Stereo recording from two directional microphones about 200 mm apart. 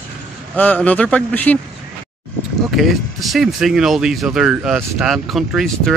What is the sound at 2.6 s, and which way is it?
Speech, centre (ahead or behind).